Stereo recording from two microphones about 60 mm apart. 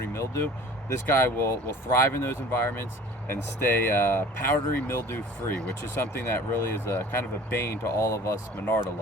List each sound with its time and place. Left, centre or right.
0.1 s speech: left
8.5 s speech: left